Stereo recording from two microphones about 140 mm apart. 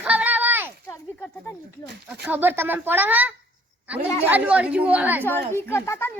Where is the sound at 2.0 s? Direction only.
10° right (ahead or behind).